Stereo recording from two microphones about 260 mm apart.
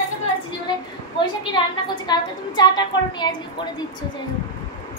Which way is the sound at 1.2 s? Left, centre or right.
Centre.